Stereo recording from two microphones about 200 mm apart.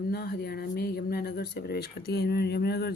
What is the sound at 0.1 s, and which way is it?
Speech, 50° left (ahead or behind).